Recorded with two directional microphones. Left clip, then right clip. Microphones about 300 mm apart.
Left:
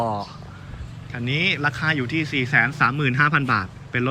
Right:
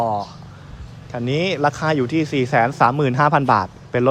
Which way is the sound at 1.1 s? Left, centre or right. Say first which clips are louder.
Right 1 dB; right.